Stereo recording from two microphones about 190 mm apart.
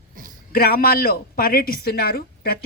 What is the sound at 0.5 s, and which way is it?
A woman's voice, 50° left (ahead or behind).